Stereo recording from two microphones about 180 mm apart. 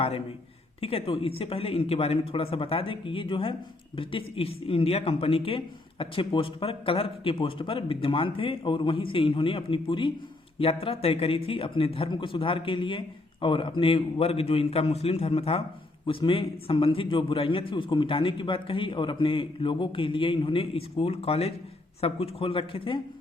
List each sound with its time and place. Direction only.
0.8 s a man's voice: 30° left (ahead or behind)